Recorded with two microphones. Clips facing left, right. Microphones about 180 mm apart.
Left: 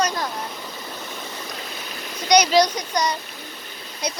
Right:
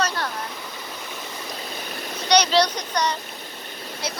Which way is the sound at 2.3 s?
10° left (ahead or behind).